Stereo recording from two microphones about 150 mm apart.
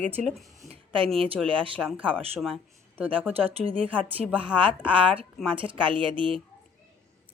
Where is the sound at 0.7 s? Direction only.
35° right (ahead or behind).